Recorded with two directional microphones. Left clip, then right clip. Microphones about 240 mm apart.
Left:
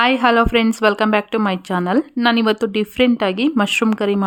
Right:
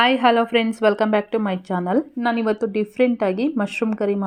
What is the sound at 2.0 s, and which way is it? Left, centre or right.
Speech, left.